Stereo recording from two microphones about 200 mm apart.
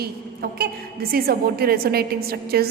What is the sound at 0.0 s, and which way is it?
A woman's voice, 50° right (ahead or behind).